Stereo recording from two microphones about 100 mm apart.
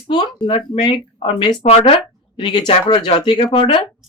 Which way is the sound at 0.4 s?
55° left (ahead or behind).